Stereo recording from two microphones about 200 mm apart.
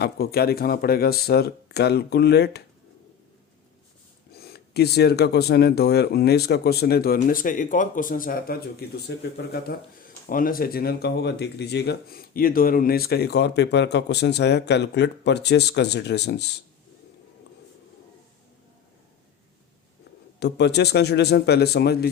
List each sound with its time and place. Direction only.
0.0 s speech: 50° left (ahead or behind)
4.4 s speech: 50° left (ahead or behind)
20.4 s a man's voice: 55° left (ahead or behind)